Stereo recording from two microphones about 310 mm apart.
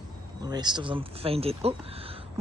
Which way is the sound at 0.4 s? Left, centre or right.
Centre.